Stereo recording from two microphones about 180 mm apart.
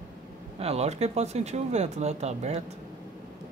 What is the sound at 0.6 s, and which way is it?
Speech, 35° right (ahead or behind).